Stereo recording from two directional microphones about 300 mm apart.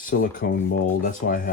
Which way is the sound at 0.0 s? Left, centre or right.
Left.